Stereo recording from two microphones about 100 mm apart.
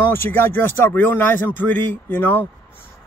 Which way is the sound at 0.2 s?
20° left (ahead or behind).